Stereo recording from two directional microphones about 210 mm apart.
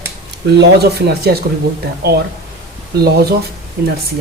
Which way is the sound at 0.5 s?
50° right (ahead or behind).